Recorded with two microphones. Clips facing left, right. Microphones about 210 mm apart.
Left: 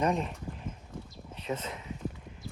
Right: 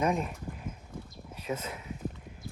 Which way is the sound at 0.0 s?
5° right (ahead or behind).